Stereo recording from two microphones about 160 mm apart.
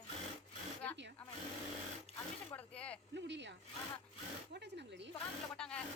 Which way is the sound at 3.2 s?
90° right.